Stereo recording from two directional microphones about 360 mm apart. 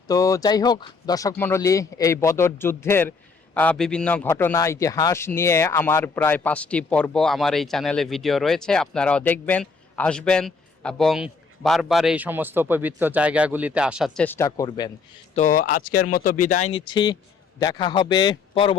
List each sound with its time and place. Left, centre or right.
0.1 s speech: centre
15.4 s speech: left